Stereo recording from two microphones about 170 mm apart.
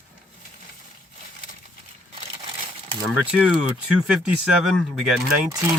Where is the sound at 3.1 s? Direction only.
5° right (ahead or behind).